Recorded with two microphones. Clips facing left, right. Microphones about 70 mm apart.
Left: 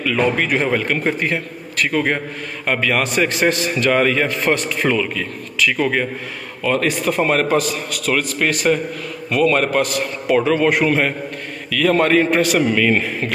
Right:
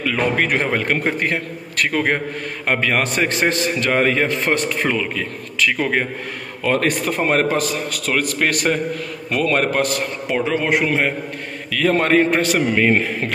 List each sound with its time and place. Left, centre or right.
0.0 s a man's voice: right
1.2 s a man's voice: right
6.6 s a man's voice: right
8.4 s a man's voice: right
9.3 s a man's voice: right
10.2 s a man's voice: centre
11.7 s a man's voice: right